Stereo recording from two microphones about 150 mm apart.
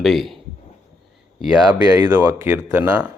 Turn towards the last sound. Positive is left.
turn(degrees=-10)  # may be behind; listen again after turning